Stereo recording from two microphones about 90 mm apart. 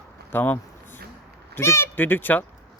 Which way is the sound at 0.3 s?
20° left (ahead or behind).